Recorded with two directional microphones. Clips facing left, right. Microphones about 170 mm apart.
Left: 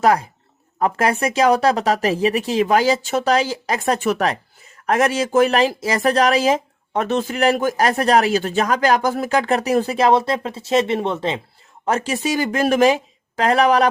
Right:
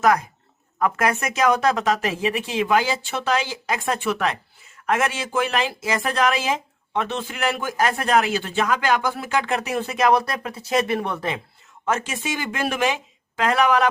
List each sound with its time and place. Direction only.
0.0 s speech: 30° left (ahead or behind)
11.9 s speech: 35° left (ahead or behind)